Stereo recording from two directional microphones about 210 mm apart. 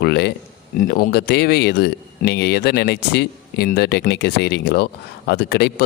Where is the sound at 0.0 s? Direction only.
50° left (ahead or behind).